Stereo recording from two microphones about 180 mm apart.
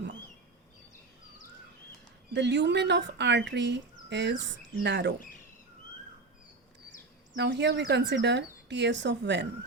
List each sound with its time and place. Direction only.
2.3 s speech: 80° right
7.3 s speech: 75° right (ahead or behind)